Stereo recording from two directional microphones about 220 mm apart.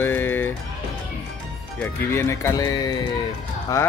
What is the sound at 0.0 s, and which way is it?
Music, 10° left (ahead or behind).